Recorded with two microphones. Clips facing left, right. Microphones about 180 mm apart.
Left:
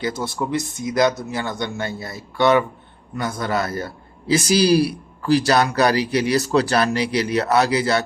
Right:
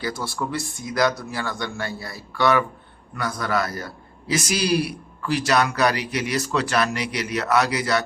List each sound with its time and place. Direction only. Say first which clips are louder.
0.0 s a man's voice: left 3 dB; 20° left (ahead or behind)